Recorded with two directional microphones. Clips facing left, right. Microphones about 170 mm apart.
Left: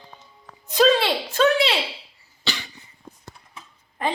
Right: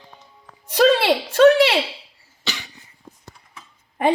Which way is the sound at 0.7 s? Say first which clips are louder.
Right 2 dB; 70° right (ahead or behind).